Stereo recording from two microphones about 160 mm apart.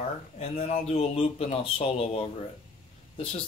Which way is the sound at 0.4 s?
40° left (ahead or behind).